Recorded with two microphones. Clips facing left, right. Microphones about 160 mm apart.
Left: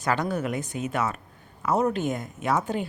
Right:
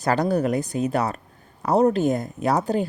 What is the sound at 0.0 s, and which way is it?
A man's voice, 35° right (ahead or behind).